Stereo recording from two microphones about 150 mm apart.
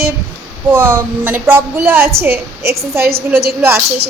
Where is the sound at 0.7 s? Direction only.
15° right (ahead or behind).